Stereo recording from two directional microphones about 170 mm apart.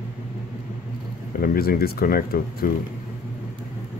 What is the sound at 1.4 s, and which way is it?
Speech, 60° left (ahead or behind).